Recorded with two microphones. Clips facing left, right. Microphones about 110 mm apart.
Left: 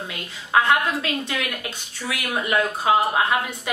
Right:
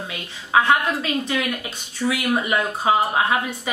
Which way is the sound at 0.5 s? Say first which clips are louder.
Right 1 dB; centre (ahead or behind).